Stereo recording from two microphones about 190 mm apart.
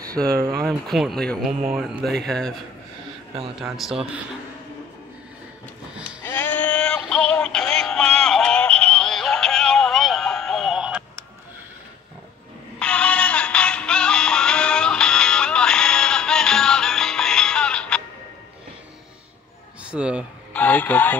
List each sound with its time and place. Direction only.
0.3 s speech: 15° right (ahead or behind)
0.7 s speech: centre (ahead or behind)
6.2 s synthetic singing: 10° left (ahead or behind)
12.7 s synthetic singing: 5° left (ahead or behind)
19.8 s a sound: 5° right (ahead or behind)
20.5 s radio: 10° left (ahead or behind)